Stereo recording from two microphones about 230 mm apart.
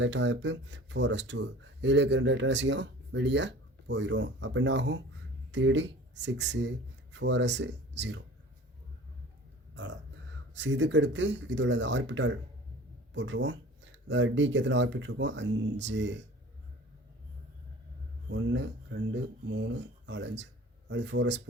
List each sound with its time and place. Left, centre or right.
0.0 s speech: right
10.5 s speech: right
18.3 s speech: right